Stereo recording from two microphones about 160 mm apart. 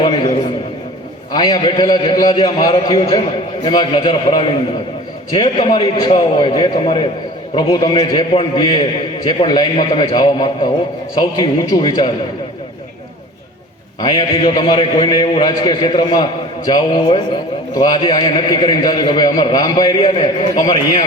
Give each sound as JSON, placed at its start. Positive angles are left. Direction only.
{"t": 1.3, "sound": "a man's voice", "side_deg": 30}
{"t": 14.0, "sound": "a man's voice", "side_deg": 35}